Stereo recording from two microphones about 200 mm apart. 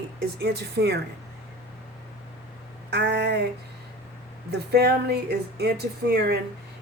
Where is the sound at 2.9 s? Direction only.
60° right (ahead or behind).